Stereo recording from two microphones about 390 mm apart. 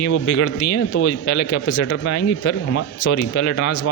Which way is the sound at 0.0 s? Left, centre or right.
Left.